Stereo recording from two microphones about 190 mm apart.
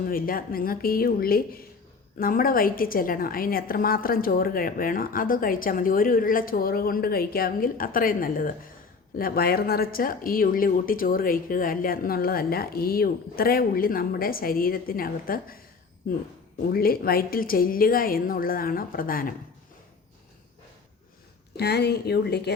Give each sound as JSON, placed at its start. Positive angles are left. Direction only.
{"t": 0.0, "sound": "a woman's voice", "side_deg": 50}
{"t": 16.6, "sound": "a woman's voice", "side_deg": 50}
{"t": 21.5, "sound": "speech", "side_deg": 60}